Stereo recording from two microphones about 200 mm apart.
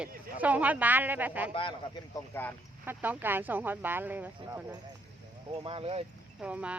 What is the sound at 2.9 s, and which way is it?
Speech, 10° right (ahead or behind).